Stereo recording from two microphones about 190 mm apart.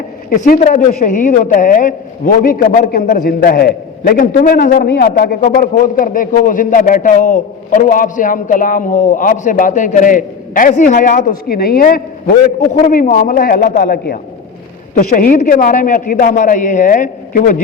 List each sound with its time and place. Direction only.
0.3 s a man's voice: 45° left (ahead or behind)